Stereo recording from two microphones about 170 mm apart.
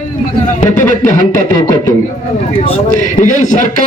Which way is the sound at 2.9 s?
50° left (ahead or behind).